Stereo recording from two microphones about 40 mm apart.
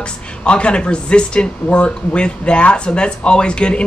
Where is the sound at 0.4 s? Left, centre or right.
Left.